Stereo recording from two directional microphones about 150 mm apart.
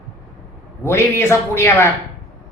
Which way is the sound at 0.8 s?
15° left (ahead or behind).